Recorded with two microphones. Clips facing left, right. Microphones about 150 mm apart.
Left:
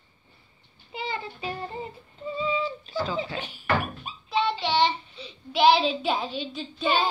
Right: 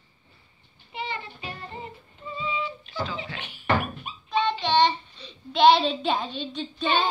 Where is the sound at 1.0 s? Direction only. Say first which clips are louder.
Left 1 dB; 35° left (ahead or behind).